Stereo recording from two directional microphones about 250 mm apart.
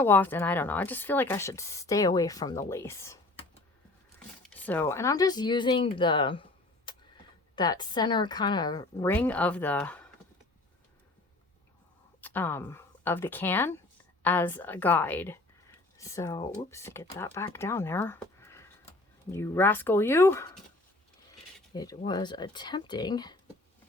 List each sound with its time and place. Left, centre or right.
0.0 s speech: centre
4.4 s speech: centre
12.2 s speech: centre
21.7 s speech: centre